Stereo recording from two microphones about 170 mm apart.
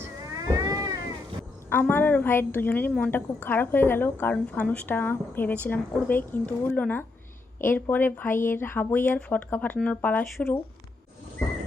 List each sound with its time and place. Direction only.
0.3 s cat: 20° right (ahead or behind)
1.7 s a woman's voice: 10° left (ahead or behind)